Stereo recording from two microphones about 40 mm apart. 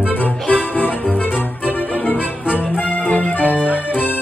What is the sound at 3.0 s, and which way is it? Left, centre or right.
Music, left.